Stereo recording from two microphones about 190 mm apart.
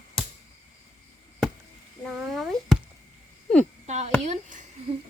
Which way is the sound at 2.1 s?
Centre (ahead or behind).